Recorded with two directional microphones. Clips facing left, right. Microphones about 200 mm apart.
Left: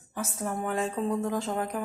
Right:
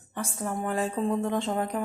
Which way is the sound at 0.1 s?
5° left (ahead or behind).